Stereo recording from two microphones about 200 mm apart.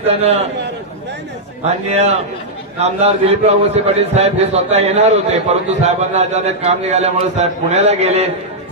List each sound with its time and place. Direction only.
0.0 s a man's voice: 30° right (ahead or behind)
1.9 s a man's voice: 30° right (ahead or behind)